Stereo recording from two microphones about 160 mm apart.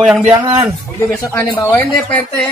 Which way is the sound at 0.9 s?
15° left (ahead or behind).